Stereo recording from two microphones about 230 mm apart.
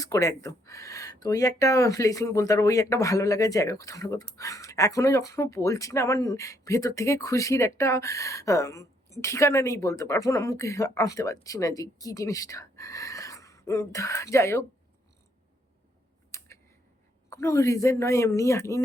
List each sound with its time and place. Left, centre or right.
0.0 s speech: centre
16.3 s a sound: centre
17.2 s speech: centre